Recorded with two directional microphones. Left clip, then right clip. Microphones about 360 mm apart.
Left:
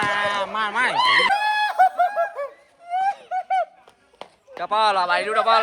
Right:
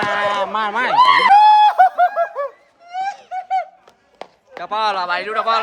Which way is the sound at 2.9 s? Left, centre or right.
Centre.